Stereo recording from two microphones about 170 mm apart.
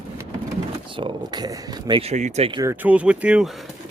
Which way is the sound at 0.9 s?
30° right (ahead or behind).